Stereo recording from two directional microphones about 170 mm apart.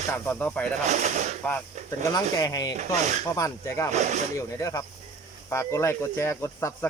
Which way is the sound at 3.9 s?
45° right (ahead or behind).